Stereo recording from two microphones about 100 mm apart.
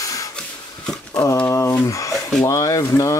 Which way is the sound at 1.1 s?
30° left (ahead or behind).